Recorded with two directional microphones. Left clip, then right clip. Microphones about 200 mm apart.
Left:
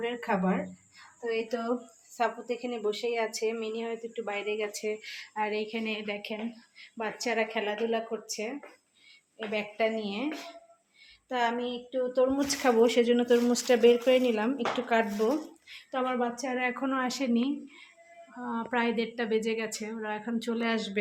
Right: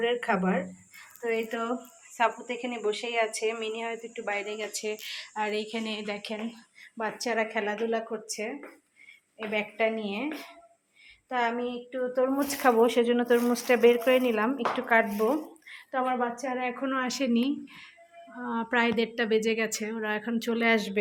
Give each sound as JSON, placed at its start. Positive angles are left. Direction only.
{"t": 0.0, "sound": "a woman's voice", "side_deg": -5}
{"t": 1.3, "sound": "a woman's voice", "side_deg": 10}
{"t": 11.3, "sound": "a woman's voice", "side_deg": 0}
{"t": 16.8, "sound": "a woman's voice", "side_deg": -5}